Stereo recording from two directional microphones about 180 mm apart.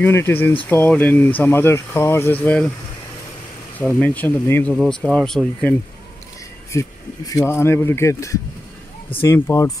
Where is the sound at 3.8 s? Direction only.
10° left (ahead or behind).